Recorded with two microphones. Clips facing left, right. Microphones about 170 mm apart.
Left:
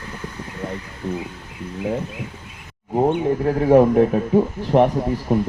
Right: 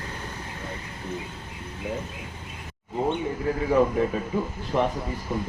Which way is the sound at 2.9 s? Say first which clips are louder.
Left 8 dB; 60° left (ahead or behind).